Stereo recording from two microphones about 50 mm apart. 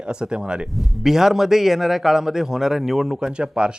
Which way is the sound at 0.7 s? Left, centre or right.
Centre.